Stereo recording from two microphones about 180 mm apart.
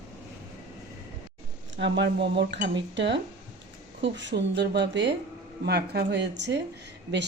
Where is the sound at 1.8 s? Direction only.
75° right (ahead or behind).